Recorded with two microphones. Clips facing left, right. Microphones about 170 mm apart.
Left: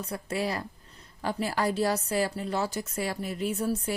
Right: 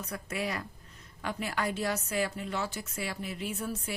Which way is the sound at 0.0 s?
30° left (ahead or behind).